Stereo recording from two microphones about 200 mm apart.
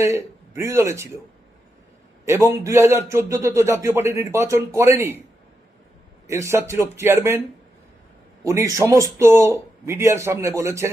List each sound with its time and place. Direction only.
0.0 s a man's voice: 15° right (ahead or behind)
2.2 s a man's voice: 15° right (ahead or behind)
6.2 s a man's voice: 15° right (ahead or behind)
8.7 s a man's voice: 15° right (ahead or behind)